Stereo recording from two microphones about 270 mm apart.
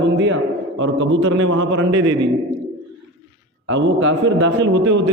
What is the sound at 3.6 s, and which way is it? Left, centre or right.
A man's voice, right.